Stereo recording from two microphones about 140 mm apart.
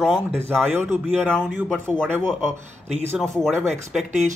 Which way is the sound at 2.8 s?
50° right (ahead or behind).